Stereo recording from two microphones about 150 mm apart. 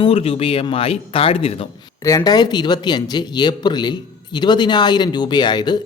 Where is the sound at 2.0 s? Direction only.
25° left (ahead or behind).